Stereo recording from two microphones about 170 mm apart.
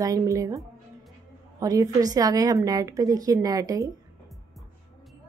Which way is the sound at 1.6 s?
20° right (ahead or behind).